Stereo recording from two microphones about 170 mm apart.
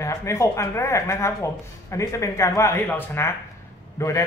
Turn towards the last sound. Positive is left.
turn(degrees=15)  # may be behind; listen again after turning